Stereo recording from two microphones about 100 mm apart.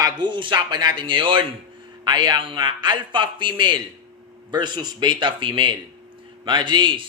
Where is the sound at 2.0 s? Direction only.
45° right (ahead or behind).